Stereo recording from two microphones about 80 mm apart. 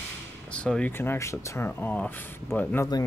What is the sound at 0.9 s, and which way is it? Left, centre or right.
Speech, left.